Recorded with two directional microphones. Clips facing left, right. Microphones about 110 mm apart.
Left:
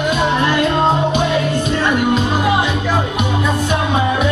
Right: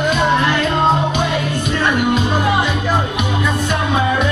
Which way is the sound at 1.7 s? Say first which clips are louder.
Right 1 dB; 15° left (ahead or behind).